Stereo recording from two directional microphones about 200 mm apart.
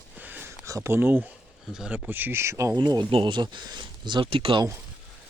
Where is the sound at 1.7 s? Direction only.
5° right (ahead or behind); by 4.7 s 25° right (ahead or behind).